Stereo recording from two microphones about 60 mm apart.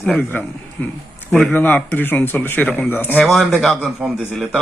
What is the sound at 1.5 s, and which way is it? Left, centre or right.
A man's voice, left.